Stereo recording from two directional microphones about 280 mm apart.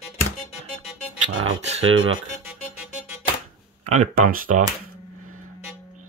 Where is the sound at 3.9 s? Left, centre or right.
Right.